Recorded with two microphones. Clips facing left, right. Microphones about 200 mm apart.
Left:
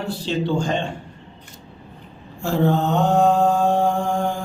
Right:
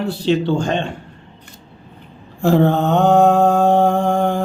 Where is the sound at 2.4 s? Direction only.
65° right (ahead or behind).